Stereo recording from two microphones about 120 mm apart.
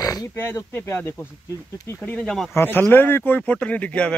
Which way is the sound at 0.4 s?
20° left (ahead or behind).